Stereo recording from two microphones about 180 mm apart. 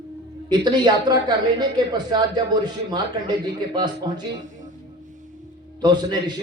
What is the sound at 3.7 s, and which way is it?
Speech, 25° right (ahead or behind).